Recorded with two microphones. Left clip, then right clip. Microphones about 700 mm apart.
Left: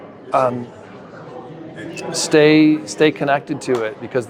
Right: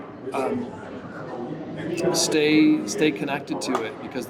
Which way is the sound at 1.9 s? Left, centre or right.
Left.